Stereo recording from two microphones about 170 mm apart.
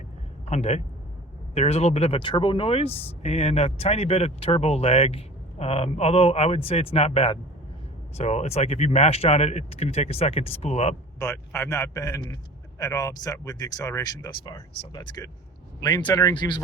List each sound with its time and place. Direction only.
0.4 s speech: 40° left (ahead or behind)
11.2 s a man's voice: 15° left (ahead or behind)